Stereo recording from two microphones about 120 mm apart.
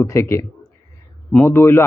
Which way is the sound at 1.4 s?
20° left (ahead or behind).